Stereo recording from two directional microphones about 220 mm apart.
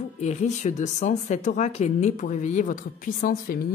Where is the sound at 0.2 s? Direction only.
30° left (ahead or behind).